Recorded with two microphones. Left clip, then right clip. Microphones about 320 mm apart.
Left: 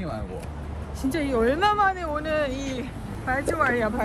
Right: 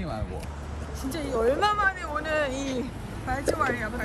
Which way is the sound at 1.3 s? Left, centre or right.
Left.